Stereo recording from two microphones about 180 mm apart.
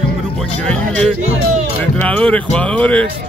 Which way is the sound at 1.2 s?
40° right (ahead or behind).